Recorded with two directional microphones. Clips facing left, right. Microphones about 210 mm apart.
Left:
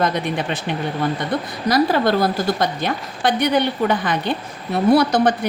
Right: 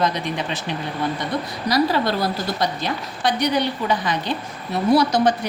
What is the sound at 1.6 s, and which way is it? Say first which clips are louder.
A woman's voice: left 3 dB; 50° left (ahead or behind).